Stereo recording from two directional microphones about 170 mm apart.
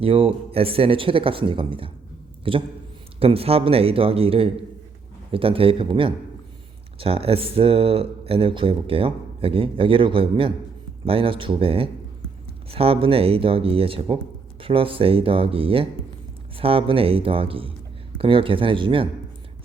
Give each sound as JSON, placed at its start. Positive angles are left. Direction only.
{"t": 0.0, "sound": "a man's voice", "side_deg": -35}